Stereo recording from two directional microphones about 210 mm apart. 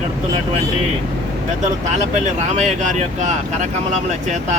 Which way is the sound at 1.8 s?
35° right (ahead or behind).